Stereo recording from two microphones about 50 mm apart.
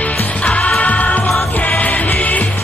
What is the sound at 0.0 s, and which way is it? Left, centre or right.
Music, left.